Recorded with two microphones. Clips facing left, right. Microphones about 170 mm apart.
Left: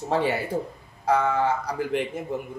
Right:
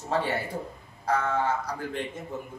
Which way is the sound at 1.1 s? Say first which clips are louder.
Left 4 dB; 85° left.